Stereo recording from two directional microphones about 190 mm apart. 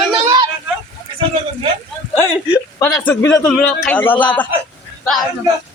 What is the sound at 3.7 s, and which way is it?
Speech, 5° left (ahead or behind).